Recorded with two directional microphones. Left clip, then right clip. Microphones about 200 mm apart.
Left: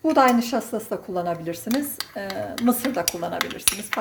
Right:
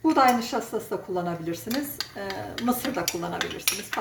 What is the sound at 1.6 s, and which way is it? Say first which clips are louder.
Speech: left 7 dB; 25° left (ahead or behind).